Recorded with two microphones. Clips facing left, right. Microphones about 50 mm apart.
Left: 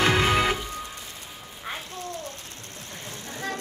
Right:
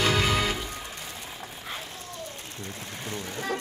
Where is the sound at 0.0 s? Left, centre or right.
Left.